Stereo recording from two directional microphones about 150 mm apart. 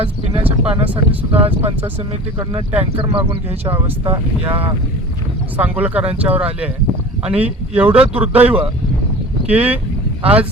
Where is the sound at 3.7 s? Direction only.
15° right (ahead or behind).